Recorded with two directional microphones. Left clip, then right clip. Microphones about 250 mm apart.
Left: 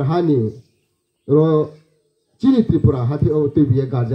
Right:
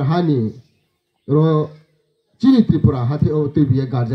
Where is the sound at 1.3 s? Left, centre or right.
Right.